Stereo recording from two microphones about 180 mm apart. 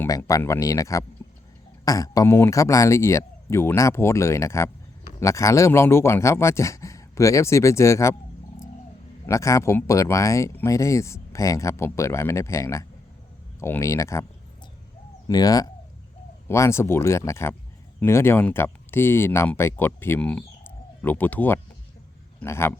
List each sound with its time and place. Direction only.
0.0 s speech: 15° left (ahead or behind)
9.2 s speech: 15° left (ahead or behind)
15.3 s speech: 20° left (ahead or behind)